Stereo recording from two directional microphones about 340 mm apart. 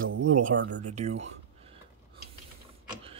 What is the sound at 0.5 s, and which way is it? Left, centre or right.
Speech, right.